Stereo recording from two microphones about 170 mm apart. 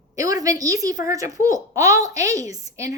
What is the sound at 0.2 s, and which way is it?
A woman's voice, 20° right (ahead or behind).